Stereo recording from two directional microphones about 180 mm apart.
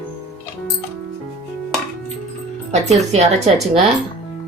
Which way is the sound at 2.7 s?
40° right (ahead or behind).